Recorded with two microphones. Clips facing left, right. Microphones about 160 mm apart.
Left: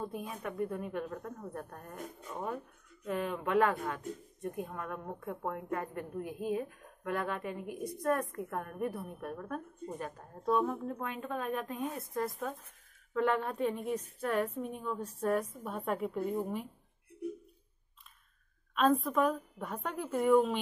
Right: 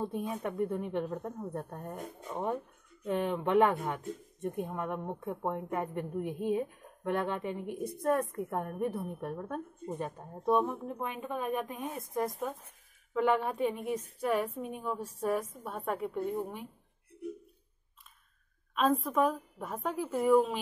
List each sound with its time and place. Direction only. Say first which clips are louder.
0.0 s a woman's voice: right 5 dB; 25° right (ahead or behind); by 16.6 s centre (ahead or behind)
18.8 s a woman's voice: even; centre (ahead or behind)